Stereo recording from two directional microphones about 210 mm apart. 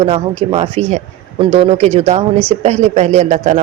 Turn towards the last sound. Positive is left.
turn(degrees=-35)  # may be behind; listen again after turning